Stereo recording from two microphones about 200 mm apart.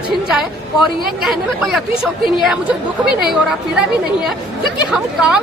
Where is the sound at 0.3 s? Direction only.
Centre (ahead or behind).